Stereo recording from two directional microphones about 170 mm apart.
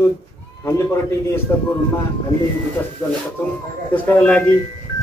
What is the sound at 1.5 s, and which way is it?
Speech, 15° left (ahead or behind).